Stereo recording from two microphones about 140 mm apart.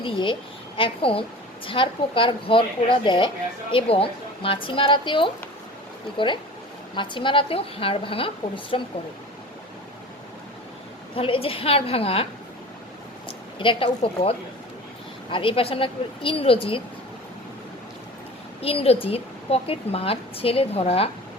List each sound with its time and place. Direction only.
0.0 s a woman's voice: 35° left (ahead or behind)
11.1 s a woman's voice: 40° left (ahead or behind)
18.6 s a woman's voice: 45° left (ahead or behind)